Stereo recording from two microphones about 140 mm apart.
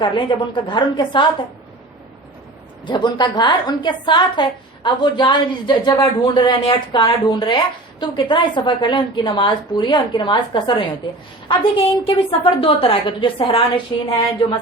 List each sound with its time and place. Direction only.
0.0 s a woman's voice: 35° left (ahead or behind)
2.8 s a woman's voice: 30° left (ahead or behind)
13.9 s speech: 30° left (ahead or behind)